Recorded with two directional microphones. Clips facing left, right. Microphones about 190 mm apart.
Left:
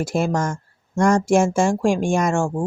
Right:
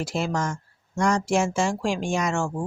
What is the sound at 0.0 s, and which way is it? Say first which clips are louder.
A woman's voice: left 5 dB; 50° left (ahead or behind).